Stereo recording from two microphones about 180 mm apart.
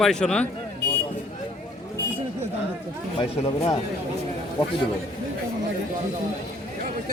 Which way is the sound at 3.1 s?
30° left (ahead or behind).